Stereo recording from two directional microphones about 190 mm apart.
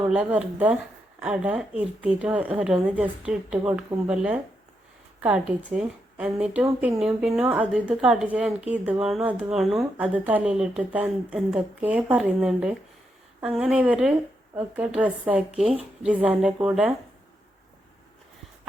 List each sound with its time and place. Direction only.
0.0 s a woman's voice: 5° right (ahead or behind)
6.7 s a woman's voice: 15° right (ahead or behind)
7.0 s a woman's voice: 5° right (ahead or behind)